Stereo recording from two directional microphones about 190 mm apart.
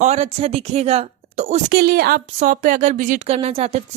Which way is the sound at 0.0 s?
35° right (ahead or behind).